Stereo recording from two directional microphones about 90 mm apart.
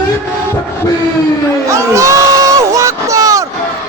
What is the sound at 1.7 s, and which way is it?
Crowd, 35° right (ahead or behind).